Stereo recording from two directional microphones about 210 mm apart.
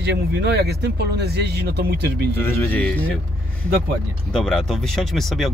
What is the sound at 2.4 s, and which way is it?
Speech, 10° left (ahead or behind).